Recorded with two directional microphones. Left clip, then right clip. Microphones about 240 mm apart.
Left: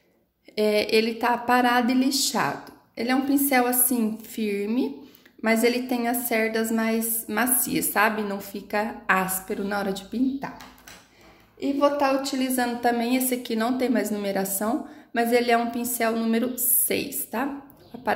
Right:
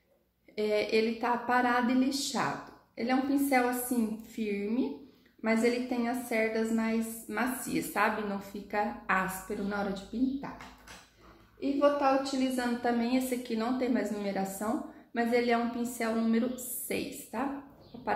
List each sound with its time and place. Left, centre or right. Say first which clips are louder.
0.6 s a woman's voice: left 7 dB; left
11.8 s a woman's voice: left 4 dB; left